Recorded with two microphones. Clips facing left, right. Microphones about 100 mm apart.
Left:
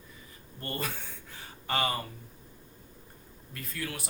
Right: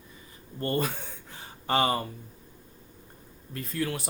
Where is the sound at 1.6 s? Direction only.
30° right (ahead or behind).